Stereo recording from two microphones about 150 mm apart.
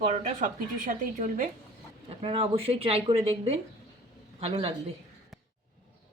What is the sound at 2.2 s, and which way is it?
Speech, 40° right (ahead or behind).